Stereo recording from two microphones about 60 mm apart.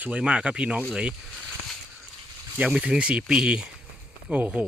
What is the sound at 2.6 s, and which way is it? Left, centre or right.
Speech, centre.